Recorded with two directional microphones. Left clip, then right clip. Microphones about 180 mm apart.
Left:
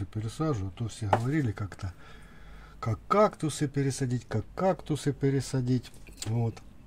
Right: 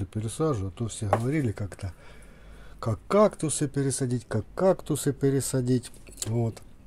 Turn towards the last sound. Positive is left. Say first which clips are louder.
# right 4 dB
turn(degrees=-20)  # may be behind; listen again after turning